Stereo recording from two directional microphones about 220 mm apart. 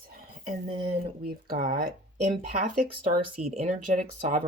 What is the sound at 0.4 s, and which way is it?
Speech, 25° right (ahead or behind).